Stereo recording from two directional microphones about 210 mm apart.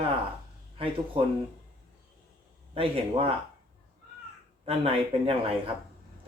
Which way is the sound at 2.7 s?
25° right (ahead or behind).